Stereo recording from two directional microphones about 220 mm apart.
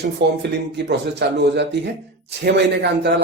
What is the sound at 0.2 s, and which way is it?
Speech, 50° right (ahead or behind).